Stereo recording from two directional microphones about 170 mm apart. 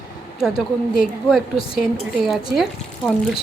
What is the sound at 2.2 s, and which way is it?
Speech, centre (ahead or behind).